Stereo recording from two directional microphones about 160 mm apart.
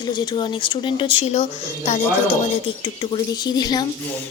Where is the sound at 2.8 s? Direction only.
30° left (ahead or behind).